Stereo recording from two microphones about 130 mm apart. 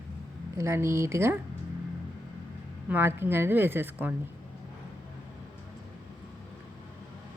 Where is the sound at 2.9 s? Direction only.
15° right (ahead or behind).